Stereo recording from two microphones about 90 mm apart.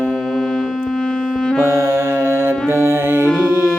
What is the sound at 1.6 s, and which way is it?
Music, 30° right (ahead or behind).